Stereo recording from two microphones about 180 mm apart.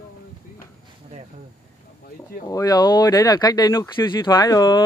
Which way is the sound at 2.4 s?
20° left (ahead or behind).